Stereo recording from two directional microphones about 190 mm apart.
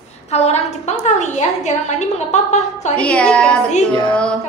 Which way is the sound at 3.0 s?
5° left (ahead or behind).